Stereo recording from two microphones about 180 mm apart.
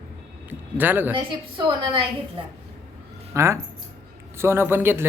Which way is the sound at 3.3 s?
15° right (ahead or behind).